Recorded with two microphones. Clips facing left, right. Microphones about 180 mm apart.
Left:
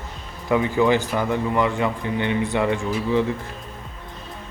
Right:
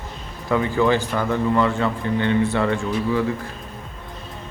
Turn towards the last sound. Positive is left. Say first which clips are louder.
# even
turn(degrees=20)  # may be behind; listen again after turning